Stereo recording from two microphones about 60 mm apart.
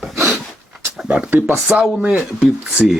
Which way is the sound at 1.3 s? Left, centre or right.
Right.